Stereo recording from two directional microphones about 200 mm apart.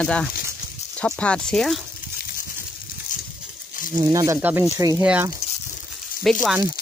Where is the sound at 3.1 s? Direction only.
40° left (ahead or behind).